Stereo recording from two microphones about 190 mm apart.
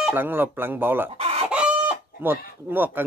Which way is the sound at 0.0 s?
10° right (ahead or behind).